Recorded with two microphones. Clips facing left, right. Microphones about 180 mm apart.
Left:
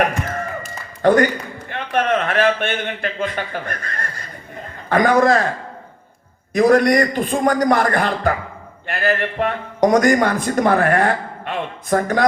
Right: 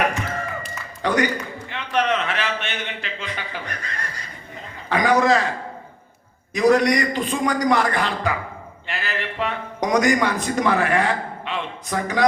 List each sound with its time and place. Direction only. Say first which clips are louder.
0.0 s a sound: left 3 dB; 50° left (ahead or behind)
1.7 s a man's voice: left 3 dB; 50° left (ahead or behind)
6.5 s a man's voice: left 3 dB; 50° left (ahead or behind)